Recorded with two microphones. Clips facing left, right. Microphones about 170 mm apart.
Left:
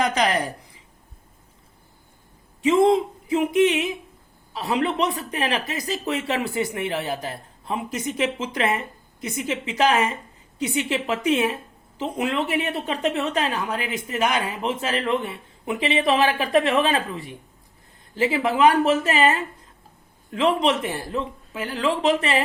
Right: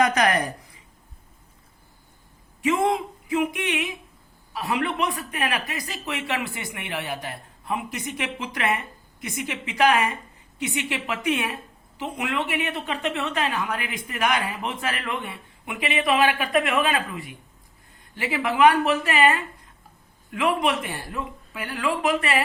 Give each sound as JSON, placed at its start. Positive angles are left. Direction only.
{"t": 3.2, "sound": "a woman's voice", "side_deg": 30}